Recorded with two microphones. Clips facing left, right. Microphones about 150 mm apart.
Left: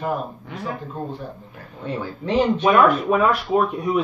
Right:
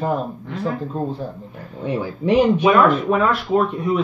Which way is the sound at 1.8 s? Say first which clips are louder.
Right 5 dB; 15° right (ahead or behind).